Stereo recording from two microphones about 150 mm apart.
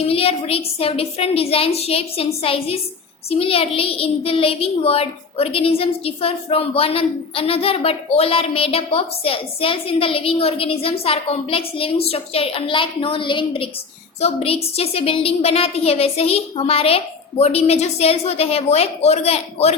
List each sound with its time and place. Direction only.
0.0 s a woman's voice: 40° left (ahead or behind)